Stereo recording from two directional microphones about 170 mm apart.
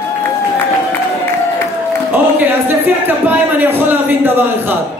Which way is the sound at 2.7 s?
10° right (ahead or behind).